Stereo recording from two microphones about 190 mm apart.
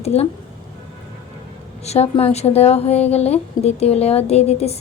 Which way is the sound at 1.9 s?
30° left (ahead or behind).